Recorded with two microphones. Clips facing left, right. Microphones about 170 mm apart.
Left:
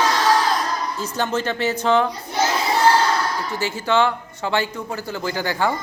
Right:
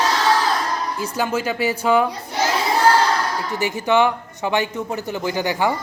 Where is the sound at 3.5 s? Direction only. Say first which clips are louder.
Right 2 dB; 15° right (ahead or behind).